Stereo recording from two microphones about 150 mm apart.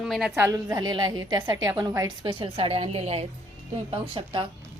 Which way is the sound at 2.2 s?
35° right (ahead or behind).